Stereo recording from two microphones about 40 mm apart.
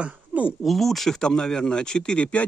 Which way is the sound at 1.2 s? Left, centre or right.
Centre.